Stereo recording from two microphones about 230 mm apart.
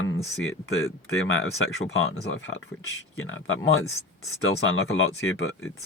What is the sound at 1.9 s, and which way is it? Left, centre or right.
Speech, left.